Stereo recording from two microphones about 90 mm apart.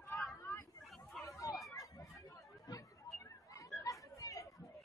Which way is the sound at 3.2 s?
35° left (ahead or behind).